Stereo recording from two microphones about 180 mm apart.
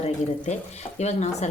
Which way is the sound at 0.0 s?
40° left (ahead or behind).